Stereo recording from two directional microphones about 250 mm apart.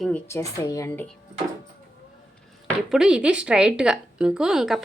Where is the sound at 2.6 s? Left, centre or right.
Centre.